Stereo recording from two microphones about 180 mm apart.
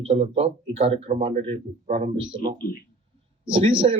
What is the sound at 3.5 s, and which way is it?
Speech, 30° right (ahead or behind).